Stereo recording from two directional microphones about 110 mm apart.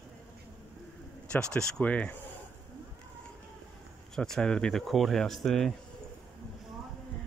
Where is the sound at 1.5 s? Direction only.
10° left (ahead or behind).